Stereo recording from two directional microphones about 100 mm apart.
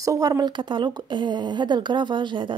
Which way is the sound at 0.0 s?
35° right (ahead or behind).